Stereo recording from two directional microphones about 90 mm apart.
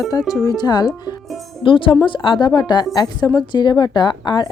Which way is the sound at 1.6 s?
70° left (ahead or behind).